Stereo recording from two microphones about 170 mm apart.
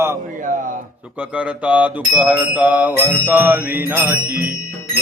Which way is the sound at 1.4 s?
5° right (ahead or behind).